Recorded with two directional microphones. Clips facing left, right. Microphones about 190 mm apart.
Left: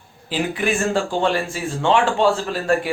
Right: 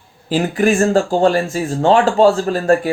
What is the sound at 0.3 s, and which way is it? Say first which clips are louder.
Speech: right 7 dB; 45° right (ahead or behind).